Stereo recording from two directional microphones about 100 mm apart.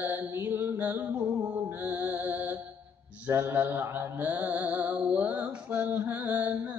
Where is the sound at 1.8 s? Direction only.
20° right (ahead or behind).